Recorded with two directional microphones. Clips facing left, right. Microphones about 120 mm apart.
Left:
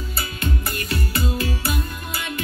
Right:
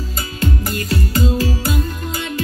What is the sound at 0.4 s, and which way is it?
Music, 30° right (ahead or behind).